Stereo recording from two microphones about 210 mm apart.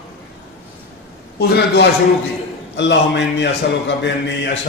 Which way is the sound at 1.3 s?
50° left (ahead or behind).